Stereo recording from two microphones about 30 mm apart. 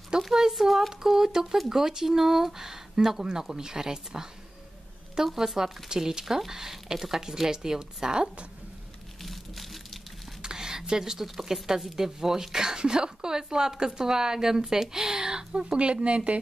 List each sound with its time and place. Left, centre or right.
0.1 s a woman's voice: right
0.5 s a woman's voice: centre
5.2 s a woman's voice: centre
9.2 s a sound: centre
10.4 s a sound: right
11.2 s a woman's voice: centre; by 15.8 s right
15.8 s speech: right